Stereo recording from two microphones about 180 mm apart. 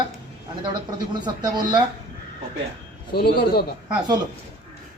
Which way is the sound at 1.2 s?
25° right (ahead or behind).